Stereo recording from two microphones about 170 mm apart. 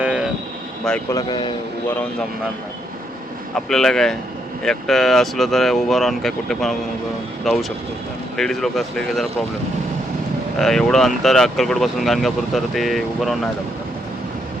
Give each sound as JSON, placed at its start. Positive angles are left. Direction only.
{"t": 0.0, "sound": "vehicle", "side_deg": -5}
{"t": 1.1, "sound": "speech", "side_deg": 25}
{"t": 3.5, "sound": "speech", "side_deg": 0}
{"t": 10.6, "sound": "speech", "side_deg": 5}